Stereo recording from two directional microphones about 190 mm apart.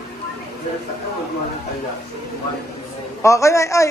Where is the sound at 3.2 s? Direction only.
15° left (ahead or behind).